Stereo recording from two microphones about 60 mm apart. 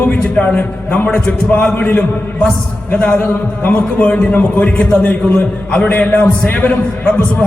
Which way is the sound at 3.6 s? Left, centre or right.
Left.